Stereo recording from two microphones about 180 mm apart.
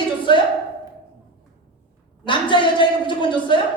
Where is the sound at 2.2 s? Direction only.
25° left (ahead or behind).